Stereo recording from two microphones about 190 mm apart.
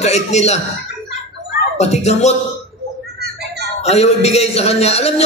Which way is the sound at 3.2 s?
60° right (ahead or behind).